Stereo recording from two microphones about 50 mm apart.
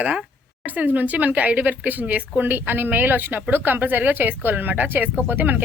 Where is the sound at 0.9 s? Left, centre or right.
Right.